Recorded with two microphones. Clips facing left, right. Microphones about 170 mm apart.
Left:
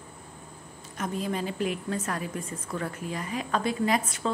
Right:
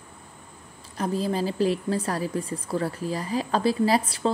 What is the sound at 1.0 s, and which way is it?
A woman's voice, 35° right (ahead or behind).